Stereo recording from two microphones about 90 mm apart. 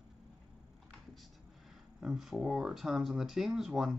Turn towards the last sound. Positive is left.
turn(degrees=-5)  # may be behind; listen again after turning